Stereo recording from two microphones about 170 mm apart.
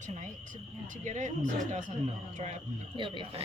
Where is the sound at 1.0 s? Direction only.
45° right (ahead or behind).